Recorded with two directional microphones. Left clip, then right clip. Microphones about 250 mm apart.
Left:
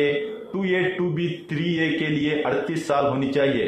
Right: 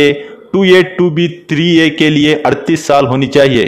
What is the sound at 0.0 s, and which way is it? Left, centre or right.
A man's voice, right.